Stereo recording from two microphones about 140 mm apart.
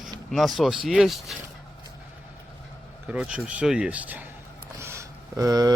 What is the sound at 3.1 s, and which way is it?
Speech, 10° right (ahead or behind).